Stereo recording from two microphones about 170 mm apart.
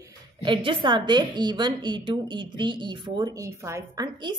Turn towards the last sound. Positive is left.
turn(degrees=-15)  # may be behind; listen again after turning